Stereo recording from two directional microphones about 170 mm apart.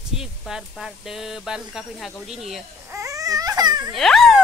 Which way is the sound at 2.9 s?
20° right (ahead or behind).